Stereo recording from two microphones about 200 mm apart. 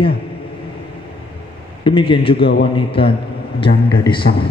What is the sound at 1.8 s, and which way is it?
A man's voice, 25° left (ahead or behind).